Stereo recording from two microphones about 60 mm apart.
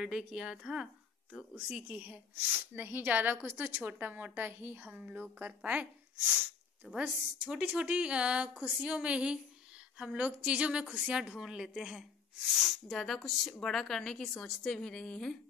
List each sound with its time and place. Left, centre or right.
0.0 s a woman's voice: centre; by 2.1 s right
2.5 s speech: right
4.8 s a woman's voice: right
6.9 s a woman's voice: centre
12.8 s speech: centre